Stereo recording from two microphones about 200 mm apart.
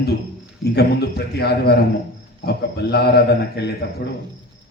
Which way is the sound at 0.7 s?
55° left (ahead or behind).